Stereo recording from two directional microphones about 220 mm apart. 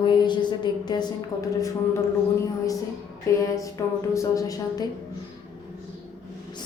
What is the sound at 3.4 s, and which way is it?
A woman's voice, 15° left (ahead or behind).